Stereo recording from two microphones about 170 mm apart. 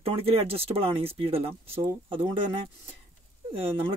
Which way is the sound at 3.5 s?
35° right (ahead or behind).